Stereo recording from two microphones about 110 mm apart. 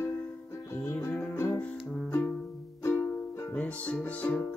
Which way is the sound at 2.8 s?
25° left (ahead or behind).